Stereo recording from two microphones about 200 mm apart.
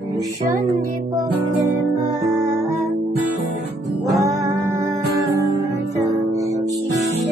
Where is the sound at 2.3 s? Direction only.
15° right (ahead or behind).